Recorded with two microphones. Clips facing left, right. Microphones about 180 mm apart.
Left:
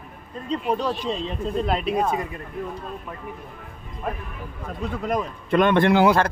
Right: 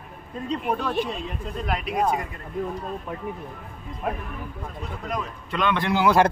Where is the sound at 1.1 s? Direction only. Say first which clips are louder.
Left 5 dB; 25° left (ahead or behind).